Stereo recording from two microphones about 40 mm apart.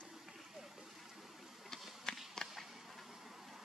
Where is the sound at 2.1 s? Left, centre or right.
Centre.